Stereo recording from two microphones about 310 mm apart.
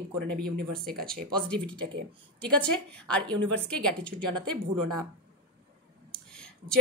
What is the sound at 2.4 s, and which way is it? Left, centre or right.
A woman's voice, centre.